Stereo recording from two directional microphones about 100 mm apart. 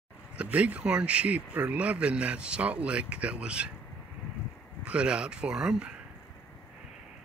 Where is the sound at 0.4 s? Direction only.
15° right (ahead or behind).